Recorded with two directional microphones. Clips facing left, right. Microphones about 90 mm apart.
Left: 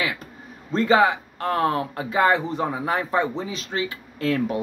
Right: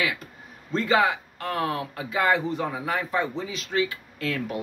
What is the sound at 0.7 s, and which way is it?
A man's voice, 30° left (ahead or behind).